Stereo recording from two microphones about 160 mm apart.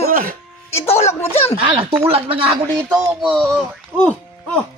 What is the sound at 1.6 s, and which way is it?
Speech, 35° right (ahead or behind).